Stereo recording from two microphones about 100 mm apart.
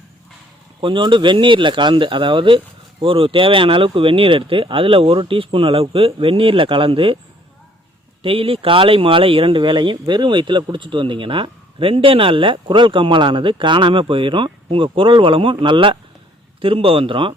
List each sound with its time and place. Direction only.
0.8 s speech: 55° right (ahead or behind)
8.2 s speech: 65° right (ahead or behind)